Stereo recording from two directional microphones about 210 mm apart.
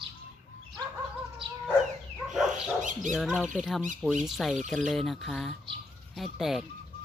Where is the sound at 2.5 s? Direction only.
35° right (ahead or behind).